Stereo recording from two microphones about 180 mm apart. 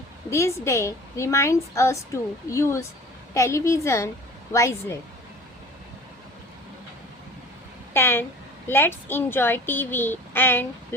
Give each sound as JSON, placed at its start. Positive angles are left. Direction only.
{"t": 0.3, "sound": "speech", "side_deg": 15}
{"t": 7.9, "sound": "speech", "side_deg": 15}